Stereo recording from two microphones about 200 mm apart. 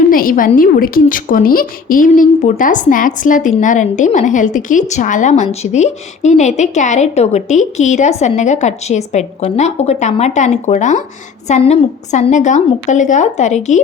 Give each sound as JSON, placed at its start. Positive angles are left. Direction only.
{"t": 0.1, "sound": "a woman's voice", "side_deg": 45}